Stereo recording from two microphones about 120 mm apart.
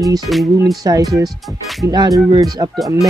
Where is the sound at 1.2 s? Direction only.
Centre (ahead or behind).